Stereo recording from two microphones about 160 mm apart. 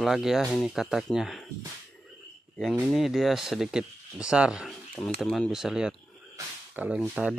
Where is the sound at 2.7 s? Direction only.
5° right (ahead or behind).